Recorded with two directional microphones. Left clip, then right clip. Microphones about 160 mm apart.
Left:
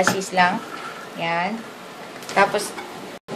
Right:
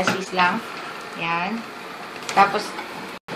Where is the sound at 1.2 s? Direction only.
35° left (ahead or behind).